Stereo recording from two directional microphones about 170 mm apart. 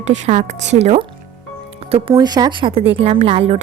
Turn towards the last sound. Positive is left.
turn(degrees=-35)  # may be behind; listen again after turning